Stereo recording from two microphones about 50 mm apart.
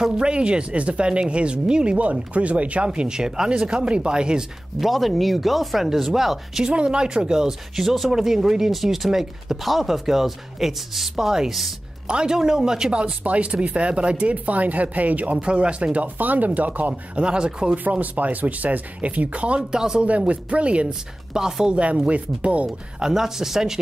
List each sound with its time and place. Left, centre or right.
0.2 s speech: right
4.7 s speech: centre
6.6 s speech: centre
12.9 s speech: right
17.8 s speech: right
23.0 s speech: centre